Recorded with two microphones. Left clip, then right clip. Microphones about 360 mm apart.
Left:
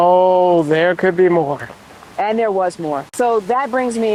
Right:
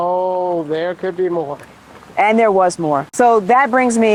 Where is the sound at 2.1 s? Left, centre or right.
Right.